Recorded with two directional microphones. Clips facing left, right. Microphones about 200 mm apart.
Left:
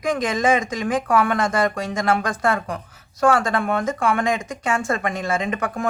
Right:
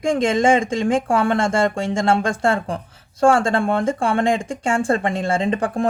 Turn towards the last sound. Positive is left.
turn(degrees=-30)  # may be behind; listen again after turning